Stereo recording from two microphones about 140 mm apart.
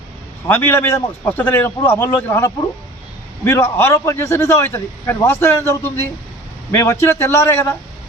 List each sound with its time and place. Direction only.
0.4 s a man's voice: 15° left (ahead or behind)